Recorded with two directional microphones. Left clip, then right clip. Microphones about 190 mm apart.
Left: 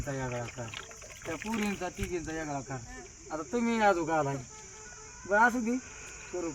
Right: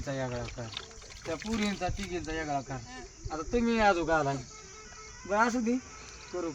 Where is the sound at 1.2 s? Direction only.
40° right (ahead or behind).